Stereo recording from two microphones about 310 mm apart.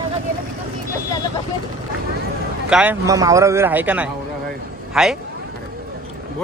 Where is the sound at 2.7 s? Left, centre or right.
Centre.